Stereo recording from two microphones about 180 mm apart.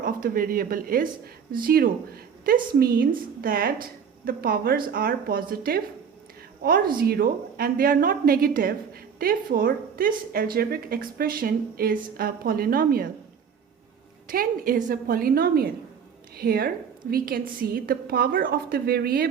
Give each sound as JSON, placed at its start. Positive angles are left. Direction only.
{"t": 0.0, "sound": "a woman's voice", "side_deg": -50}
{"t": 14.3, "sound": "a woman's voice", "side_deg": -50}